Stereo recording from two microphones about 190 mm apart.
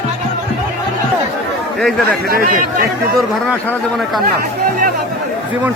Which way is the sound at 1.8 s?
Centre (ahead or behind).